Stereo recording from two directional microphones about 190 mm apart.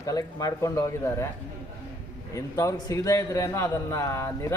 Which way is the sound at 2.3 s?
15° left (ahead or behind).